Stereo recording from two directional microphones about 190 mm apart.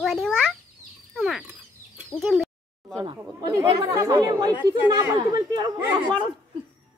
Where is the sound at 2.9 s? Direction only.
20° right (ahead or behind).